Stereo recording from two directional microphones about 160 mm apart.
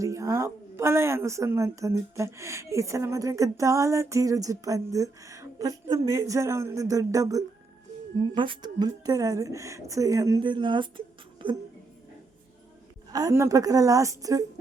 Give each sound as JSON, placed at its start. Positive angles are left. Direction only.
{"t": 0.0, "sound": "speech", "side_deg": -20}
{"t": 13.1, "sound": "speech", "side_deg": -20}